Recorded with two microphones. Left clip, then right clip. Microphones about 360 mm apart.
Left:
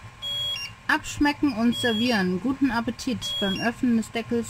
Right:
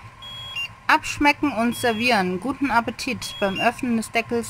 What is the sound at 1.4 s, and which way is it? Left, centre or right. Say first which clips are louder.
Speech: right 2 dB; right.